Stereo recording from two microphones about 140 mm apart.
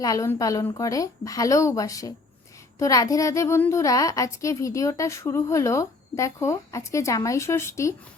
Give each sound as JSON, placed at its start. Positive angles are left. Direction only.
{"t": 0.0, "sound": "a child's voice", "side_deg": 25}